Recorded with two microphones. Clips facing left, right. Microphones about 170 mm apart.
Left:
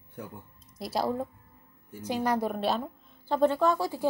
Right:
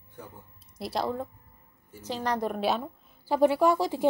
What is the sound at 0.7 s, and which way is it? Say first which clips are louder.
A woman's voice: left 1 dB; centre (ahead or behind).